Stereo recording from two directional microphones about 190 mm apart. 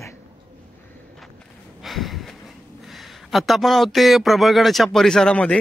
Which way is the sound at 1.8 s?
Centre (ahead or behind).